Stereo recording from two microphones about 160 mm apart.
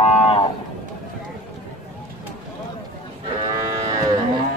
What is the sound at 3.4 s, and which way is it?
Cattle, 25° right (ahead or behind).